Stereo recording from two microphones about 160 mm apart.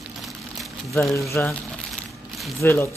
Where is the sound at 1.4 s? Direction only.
10° left (ahead or behind).